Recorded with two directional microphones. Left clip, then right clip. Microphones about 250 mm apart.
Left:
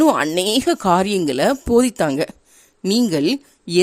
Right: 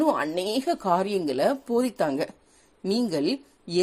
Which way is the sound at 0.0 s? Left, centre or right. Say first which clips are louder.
Left 8 dB; left.